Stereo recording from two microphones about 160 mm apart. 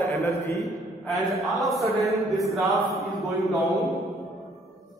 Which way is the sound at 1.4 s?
Centre (ahead or behind).